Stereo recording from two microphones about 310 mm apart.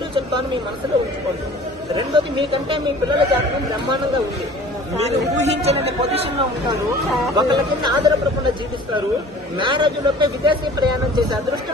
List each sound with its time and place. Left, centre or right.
2.0 s a man's voice: centre
4.9 s speech: right
7.3 s a man's voice: centre
9.6 s a man's voice: centre